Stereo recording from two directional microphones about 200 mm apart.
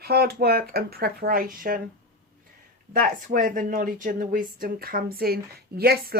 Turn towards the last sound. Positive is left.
turn(degrees=-50)  # may be behind; listen again after turning